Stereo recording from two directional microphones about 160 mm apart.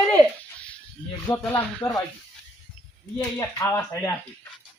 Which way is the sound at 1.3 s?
25° left (ahead or behind).